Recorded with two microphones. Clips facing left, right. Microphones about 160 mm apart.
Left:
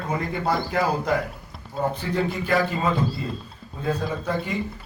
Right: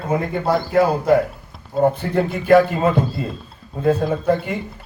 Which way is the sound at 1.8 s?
55° right (ahead or behind).